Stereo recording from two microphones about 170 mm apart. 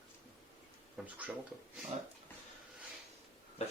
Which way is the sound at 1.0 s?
5° right (ahead or behind).